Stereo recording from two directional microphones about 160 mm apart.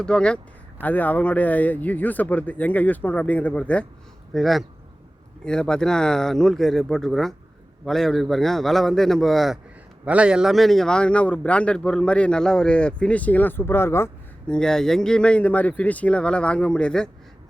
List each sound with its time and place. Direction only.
0.0 s a man's voice: 5° left (ahead or behind)
14.5 s a man's voice: 5° left (ahead or behind)